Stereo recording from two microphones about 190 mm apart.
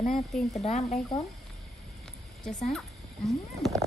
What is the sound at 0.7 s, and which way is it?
Speech, 35° left (ahead or behind).